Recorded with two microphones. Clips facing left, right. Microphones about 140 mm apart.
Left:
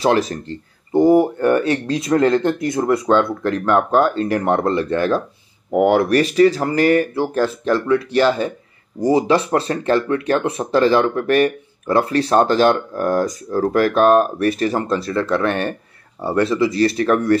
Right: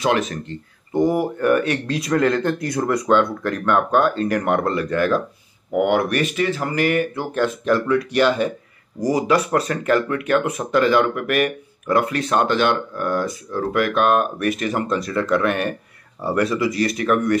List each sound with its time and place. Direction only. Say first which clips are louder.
0.0 s speech: left 3 dB; 35° left (ahead or behind)